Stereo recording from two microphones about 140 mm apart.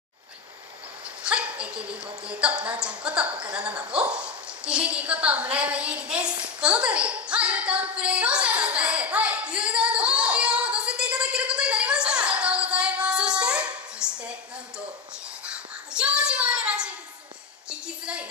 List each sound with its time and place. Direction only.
1.2 s speech: 10° right (ahead or behind)
1.8 s speech: 40° right (ahead or behind)
2.2 s a woman's voice: 10° right (ahead or behind)
8.0 s a sound: 10° right (ahead or behind)
15.4 s child singing: 5° right (ahead or behind)
17.6 s a sound: 5° right (ahead or behind)